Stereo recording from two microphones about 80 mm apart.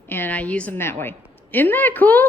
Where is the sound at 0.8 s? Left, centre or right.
Left.